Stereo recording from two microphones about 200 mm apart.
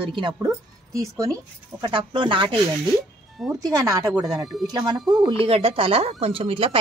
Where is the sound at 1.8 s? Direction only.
25° right (ahead or behind).